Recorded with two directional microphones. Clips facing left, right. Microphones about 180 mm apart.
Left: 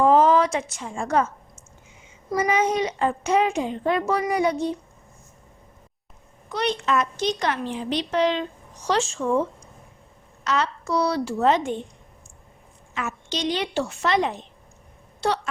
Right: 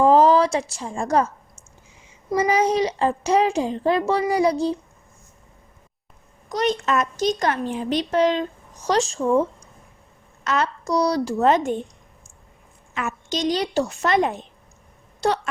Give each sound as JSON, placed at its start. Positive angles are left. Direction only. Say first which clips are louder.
{"t": 0.0, "sound": "speech", "louder": "right 2 dB", "side_deg": -35}
{"t": 2.3, "sound": "a child's voice", "louder": "right 3 dB", "side_deg": -30}
{"t": 6.5, "sound": "speech", "louder": "right 2 dB", "side_deg": -40}
{"t": 10.4, "sound": "speech", "louder": "right 1 dB", "side_deg": -50}
{"t": 12.9, "sound": "speech", "louder": "right 3 dB", "side_deg": -50}